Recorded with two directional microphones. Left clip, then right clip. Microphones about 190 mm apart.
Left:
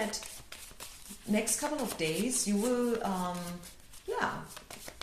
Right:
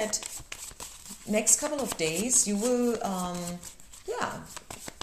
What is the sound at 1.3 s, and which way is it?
Speech, 35° right (ahead or behind).